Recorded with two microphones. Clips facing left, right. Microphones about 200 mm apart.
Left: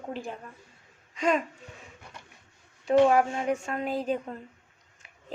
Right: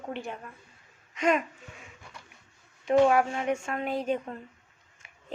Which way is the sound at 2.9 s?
35° left (ahead or behind).